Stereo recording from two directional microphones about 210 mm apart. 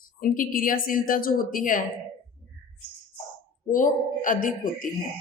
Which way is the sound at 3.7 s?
40° left (ahead or behind).